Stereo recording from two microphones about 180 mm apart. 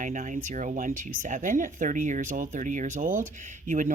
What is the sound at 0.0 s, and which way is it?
Speech, 45° right (ahead or behind).